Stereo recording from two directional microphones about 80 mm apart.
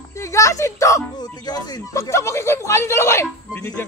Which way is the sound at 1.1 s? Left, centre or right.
Left.